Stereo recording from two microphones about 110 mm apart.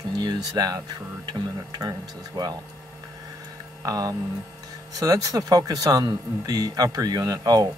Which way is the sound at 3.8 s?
35° right (ahead or behind).